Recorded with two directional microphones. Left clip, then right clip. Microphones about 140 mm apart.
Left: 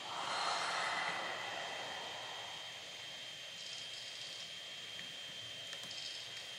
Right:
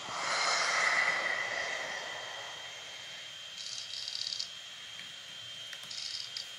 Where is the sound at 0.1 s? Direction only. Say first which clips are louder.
Right 7 dB; 20° right (ahead or behind).